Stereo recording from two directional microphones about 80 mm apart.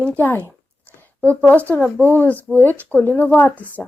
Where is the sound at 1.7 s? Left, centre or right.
Centre.